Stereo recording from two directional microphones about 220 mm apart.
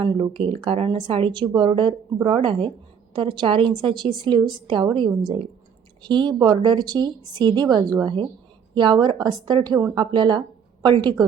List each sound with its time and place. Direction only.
0.0 s a woman's voice: 25° right (ahead or behind)